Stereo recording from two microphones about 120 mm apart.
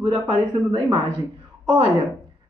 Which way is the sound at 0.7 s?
40° right (ahead or behind).